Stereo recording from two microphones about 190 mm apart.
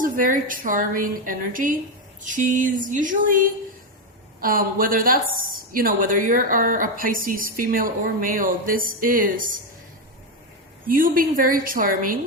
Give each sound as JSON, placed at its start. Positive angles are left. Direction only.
{"t": 0.0, "sound": "a woman's voice", "side_deg": -45}
{"t": 10.8, "sound": "a woman's voice", "side_deg": -50}